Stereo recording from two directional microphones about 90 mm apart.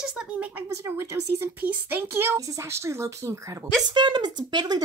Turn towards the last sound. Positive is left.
turn(degrees=-50)  # may be behind; listen again after turning